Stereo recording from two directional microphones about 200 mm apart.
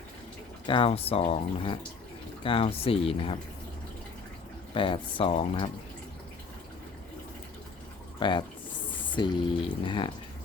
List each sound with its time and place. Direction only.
0.7 s speech: 30° left (ahead or behind)
4.7 s speech: 25° left (ahead or behind)
8.2 s speech: 25° left (ahead or behind)